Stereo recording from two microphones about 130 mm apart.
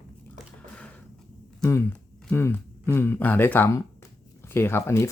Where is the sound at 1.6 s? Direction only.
20° left (ahead or behind).